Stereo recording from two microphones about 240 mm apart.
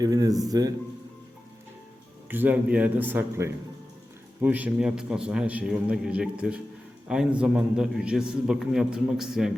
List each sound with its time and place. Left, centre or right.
0.0 s a man's voice: centre
2.3 s a man's voice: centre